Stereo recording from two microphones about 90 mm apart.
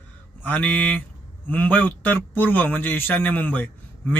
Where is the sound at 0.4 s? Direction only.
15° left (ahead or behind).